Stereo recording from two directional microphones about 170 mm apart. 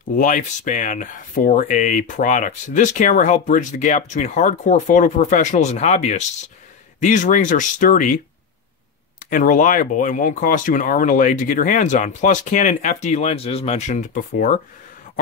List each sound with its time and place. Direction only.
0.1 s speech: 50° left (ahead or behind)
9.3 s speech: 50° left (ahead or behind)